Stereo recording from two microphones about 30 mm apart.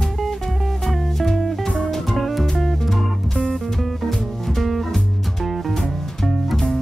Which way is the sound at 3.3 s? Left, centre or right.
Centre.